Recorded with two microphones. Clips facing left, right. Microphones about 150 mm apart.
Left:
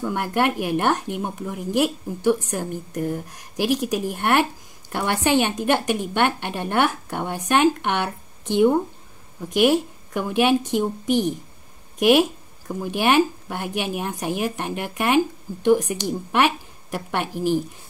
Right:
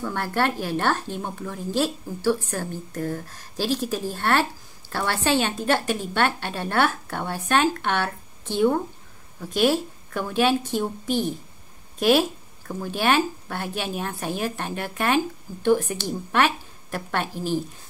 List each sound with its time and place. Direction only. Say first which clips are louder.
0.0 s speech: left 3 dB; 15° left (ahead or behind)